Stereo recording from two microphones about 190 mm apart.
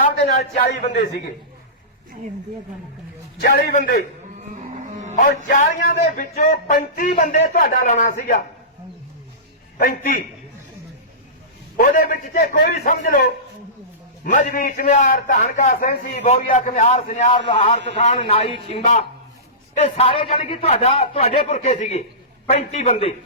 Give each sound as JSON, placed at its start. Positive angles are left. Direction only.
{"t": 0.0, "sound": "a man's voice", "side_deg": 45}
{"t": 3.4, "sound": "speech", "side_deg": 55}
{"t": 4.4, "sound": "dog", "side_deg": -40}
{"t": 5.5, "sound": "speech", "side_deg": 45}
{"t": 6.3, "sound": "speech", "side_deg": 50}
{"t": 9.7, "sound": "speech", "side_deg": 50}
{"t": 11.8, "sound": "speech", "side_deg": 45}
{"t": 12.7, "sound": "a man's voice", "side_deg": 40}
{"t": 13.1, "sound": "a man's voice", "side_deg": 55}
{"t": 14.3, "sound": "a man's voice", "side_deg": 45}
{"t": 17.3, "sound": "a man's voice", "side_deg": 25}